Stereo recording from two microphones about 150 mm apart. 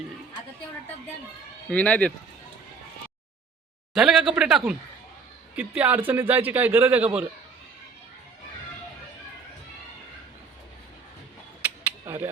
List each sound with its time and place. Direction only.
1.7 s speech: 10° left (ahead or behind)
3.9 s a man's voice: 5° right (ahead or behind)
11.6 s a sound: 15° right (ahead or behind)